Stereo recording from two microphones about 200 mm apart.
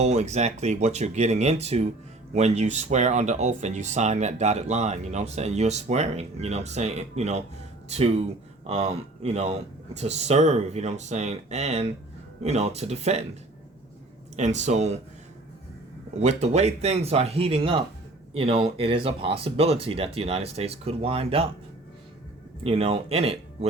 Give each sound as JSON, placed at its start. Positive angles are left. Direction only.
{"t": 0.0, "sound": "speech", "side_deg": -35}
{"t": 8.6, "sound": "speech", "side_deg": -30}
{"t": 14.3, "sound": "speech", "side_deg": -35}
{"t": 16.2, "sound": "speech", "side_deg": -35}
{"t": 22.6, "sound": "speech", "side_deg": -30}